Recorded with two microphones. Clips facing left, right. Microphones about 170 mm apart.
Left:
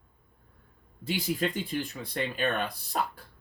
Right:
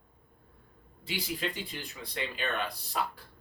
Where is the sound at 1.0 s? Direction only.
45° left (ahead or behind).